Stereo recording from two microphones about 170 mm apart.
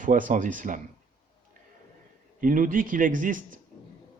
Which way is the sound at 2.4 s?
55° right (ahead or behind).